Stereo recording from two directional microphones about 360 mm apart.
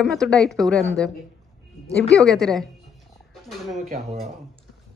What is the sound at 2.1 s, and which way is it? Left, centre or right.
Speech, centre.